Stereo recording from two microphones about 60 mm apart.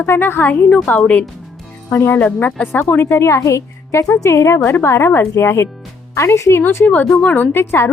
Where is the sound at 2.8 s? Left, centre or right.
Left.